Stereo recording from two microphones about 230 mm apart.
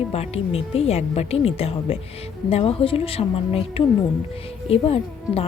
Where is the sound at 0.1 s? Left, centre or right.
Left.